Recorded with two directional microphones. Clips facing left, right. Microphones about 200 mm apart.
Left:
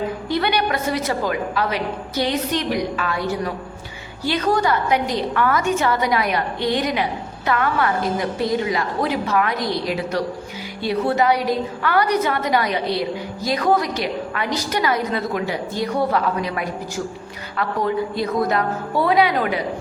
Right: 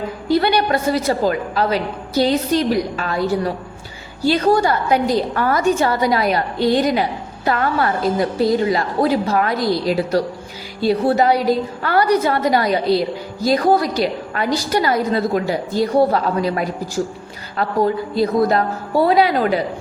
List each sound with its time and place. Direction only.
0.3 s a woman's voice: 35° right (ahead or behind)